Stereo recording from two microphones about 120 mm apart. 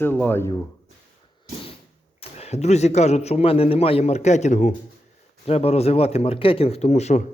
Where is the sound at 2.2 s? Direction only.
60° left (ahead or behind); by 4.8 s 80° left.